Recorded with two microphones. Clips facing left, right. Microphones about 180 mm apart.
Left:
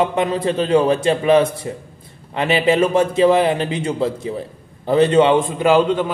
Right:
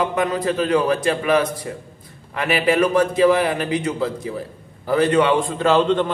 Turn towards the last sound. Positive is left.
turn(degrees=10)  # may be behind; listen again after turning